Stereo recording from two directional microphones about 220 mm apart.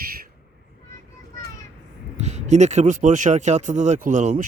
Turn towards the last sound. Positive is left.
turn(degrees=-35)  # may be behind; listen again after turning